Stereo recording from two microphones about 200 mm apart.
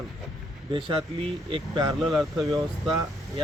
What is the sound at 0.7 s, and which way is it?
Speech, 25° right (ahead or behind).